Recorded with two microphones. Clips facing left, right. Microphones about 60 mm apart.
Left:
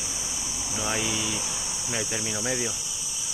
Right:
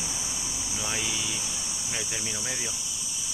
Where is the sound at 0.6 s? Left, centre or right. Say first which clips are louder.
Left 5 dB; centre.